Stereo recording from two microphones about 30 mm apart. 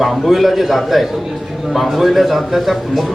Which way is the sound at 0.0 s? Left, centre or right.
Centre.